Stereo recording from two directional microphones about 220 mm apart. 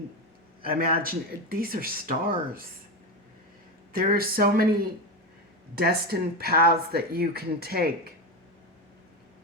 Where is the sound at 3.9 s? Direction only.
40° right (ahead or behind).